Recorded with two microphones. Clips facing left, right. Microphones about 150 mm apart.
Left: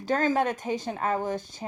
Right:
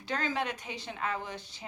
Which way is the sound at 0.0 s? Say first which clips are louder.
Left 9 dB; 45° left (ahead or behind).